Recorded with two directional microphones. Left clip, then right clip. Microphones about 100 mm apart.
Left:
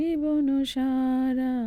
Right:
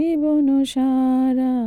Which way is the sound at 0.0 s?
55° right (ahead or behind).